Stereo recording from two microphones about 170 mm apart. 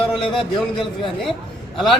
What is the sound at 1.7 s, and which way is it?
Speech, centre (ahead or behind).